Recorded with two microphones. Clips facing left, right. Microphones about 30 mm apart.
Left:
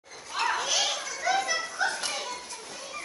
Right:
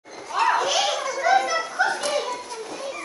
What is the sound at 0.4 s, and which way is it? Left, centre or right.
Children playing, centre.